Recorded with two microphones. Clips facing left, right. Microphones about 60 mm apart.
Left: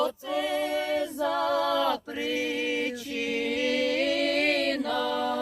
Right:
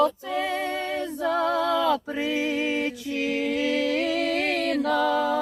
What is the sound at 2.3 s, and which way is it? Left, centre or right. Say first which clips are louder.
Music: right 3 dB; centre.